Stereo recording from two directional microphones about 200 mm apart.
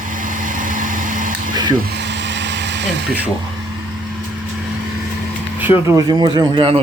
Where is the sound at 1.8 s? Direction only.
60° right (ahead or behind).